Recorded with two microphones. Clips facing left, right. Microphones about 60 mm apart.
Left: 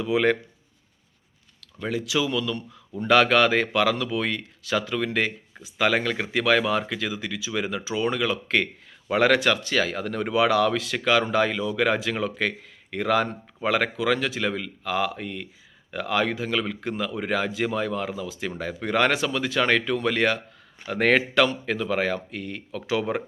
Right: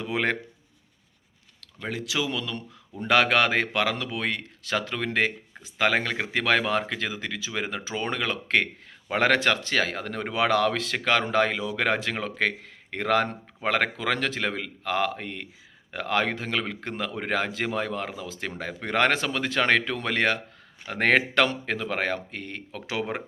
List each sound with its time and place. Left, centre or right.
0.0 s speech: right
1.9 s speech: right
22.9 s speech: right